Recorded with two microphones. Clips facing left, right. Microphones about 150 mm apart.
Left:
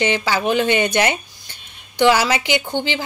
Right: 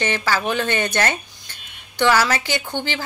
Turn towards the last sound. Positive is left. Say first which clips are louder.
# left 4 dB
turn(degrees=15)  # may be behind; listen again after turning